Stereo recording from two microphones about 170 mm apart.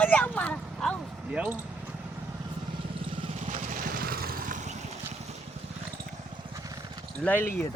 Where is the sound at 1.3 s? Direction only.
10° right (ahead or behind).